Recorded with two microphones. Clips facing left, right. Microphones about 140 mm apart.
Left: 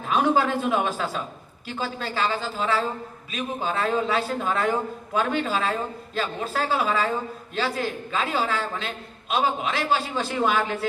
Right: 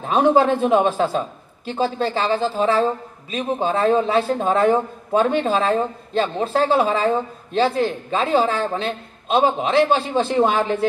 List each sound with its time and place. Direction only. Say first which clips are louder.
0.0 s a man's voice: right 6 dB; 25° right (ahead or behind)